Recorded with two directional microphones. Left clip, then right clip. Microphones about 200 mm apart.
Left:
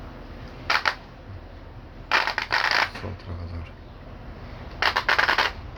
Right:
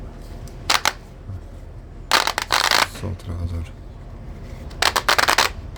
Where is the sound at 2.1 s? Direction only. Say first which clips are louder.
Right 4 dB; 60° right (ahead or behind).